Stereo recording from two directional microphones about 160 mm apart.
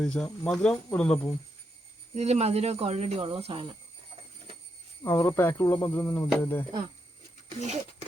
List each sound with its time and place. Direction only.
0.0 s speech: 5° left (ahead or behind)
2.1 s speech: 40° right (ahead or behind)
5.0 s speech: 15° left (ahead or behind)
7.6 s speech: 45° right (ahead or behind)